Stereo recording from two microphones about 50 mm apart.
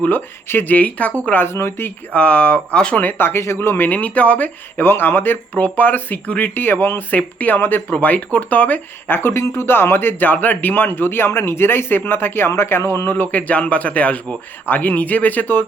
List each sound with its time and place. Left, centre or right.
0.4 s speech: left
0.7 s a man's voice: left
1.5 s speech: left
2.1 s speech: left
2.9 s speech: left
3.4 s speech: left
3.8 s a man's voice: left
4.8 s a man's voice: left
6.5 s speech: left
7.1 s a man's voice: left
13.1 s a man's voice: left